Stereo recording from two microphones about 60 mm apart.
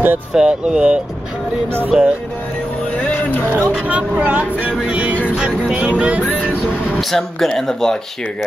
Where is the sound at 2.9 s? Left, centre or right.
Left.